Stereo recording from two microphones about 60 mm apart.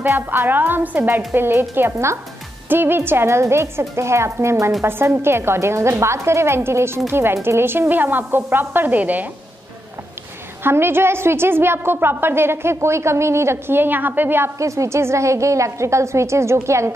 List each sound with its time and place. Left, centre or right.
0.0 s a woman's voice: right
10.6 s a woman's voice: right
14.6 s a woman's voice: right